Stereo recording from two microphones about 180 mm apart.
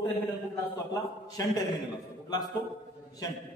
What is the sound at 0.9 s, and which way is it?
A man's voice, 20° left (ahead or behind).